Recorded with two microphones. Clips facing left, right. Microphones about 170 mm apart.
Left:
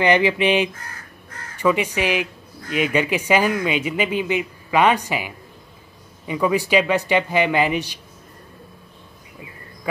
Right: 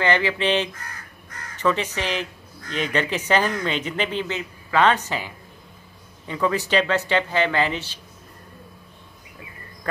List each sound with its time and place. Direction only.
0.0 s speech: 15° left (ahead or behind)